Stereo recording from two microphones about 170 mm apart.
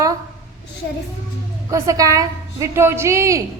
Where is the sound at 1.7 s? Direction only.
20° right (ahead or behind).